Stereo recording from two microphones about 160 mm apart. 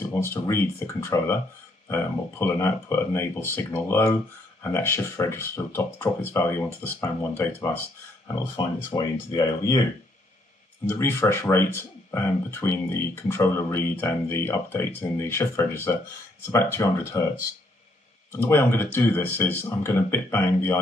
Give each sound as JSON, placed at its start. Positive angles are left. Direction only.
{"t": 0.1, "sound": "speech", "side_deg": 15}
{"t": 10.9, "sound": "speech", "side_deg": 15}
{"t": 18.3, "sound": "speech", "side_deg": 15}